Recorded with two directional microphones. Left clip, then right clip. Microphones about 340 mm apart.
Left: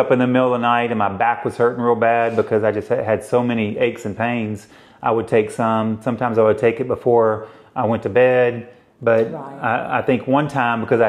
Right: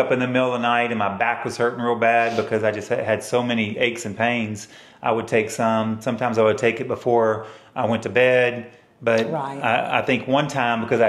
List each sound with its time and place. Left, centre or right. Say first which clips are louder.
0.1 s speech: left 4 dB; left